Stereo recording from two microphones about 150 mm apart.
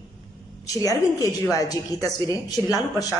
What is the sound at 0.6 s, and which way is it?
A woman's voice, 20° left (ahead or behind).